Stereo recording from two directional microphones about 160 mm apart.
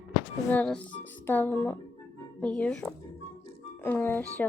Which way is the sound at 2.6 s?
5° left (ahead or behind).